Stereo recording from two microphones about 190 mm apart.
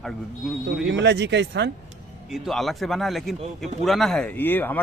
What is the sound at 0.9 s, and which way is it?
Speech, 70° right (ahead or behind).